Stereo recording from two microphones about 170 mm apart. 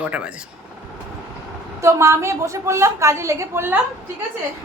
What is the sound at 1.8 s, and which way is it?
A woman's voice, 15° right (ahead or behind).